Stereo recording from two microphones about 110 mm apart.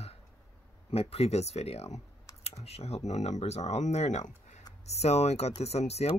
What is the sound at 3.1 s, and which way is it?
Speech, 90° left.